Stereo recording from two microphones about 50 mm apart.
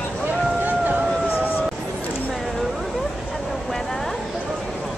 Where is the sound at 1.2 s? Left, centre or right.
Left.